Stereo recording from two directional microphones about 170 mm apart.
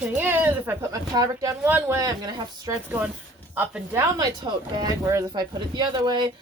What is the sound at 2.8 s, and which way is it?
Speech, 10° right (ahead or behind).